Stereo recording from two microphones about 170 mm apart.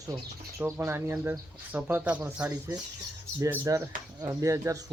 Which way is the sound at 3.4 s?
20° right (ahead or behind).